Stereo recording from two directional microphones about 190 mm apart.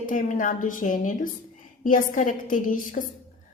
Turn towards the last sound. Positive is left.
turn(degrees=45)  # may be behind; listen again after turning